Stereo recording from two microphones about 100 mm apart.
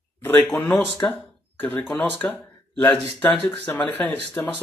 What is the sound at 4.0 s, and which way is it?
Speech, 15° left (ahead or behind).